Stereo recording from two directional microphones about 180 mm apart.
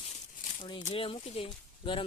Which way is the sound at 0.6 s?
25° left (ahead or behind).